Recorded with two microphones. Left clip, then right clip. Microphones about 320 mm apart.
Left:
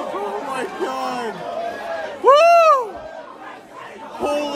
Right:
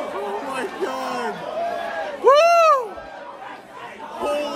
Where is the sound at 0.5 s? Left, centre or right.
Centre.